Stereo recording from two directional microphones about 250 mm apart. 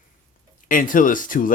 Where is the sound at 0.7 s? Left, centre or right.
Left.